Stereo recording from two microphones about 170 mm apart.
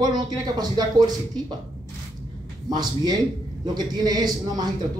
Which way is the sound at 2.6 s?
25° right (ahead or behind).